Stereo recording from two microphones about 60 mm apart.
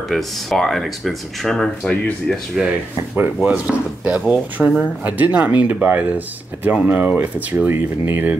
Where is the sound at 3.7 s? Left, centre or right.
Centre.